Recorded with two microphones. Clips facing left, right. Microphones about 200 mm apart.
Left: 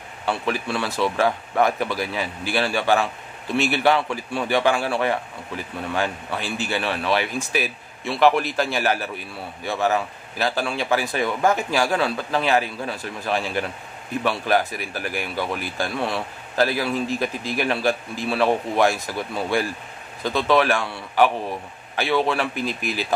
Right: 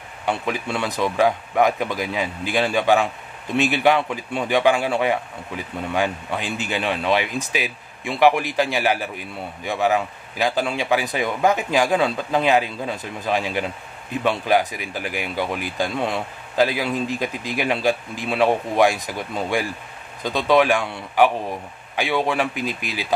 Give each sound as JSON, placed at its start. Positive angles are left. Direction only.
{"t": 0.2, "sound": "speech", "side_deg": -20}